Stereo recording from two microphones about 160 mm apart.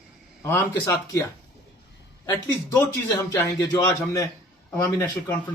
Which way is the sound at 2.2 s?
20° left (ahead or behind).